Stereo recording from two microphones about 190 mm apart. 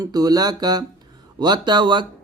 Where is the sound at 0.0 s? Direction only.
20° right (ahead or behind).